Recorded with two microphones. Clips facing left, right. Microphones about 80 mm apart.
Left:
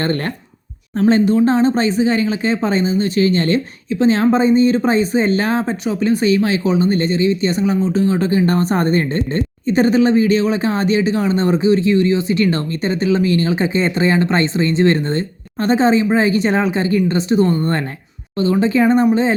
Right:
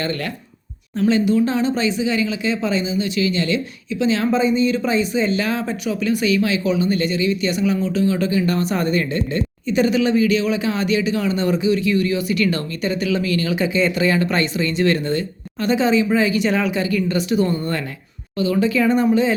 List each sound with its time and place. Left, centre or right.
0.9 s speech: left